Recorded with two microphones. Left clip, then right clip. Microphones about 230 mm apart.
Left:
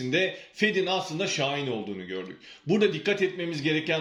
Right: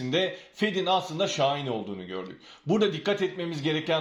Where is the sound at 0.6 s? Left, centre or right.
Centre.